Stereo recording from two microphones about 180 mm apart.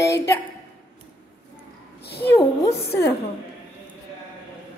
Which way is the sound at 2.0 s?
65° left (ahead or behind).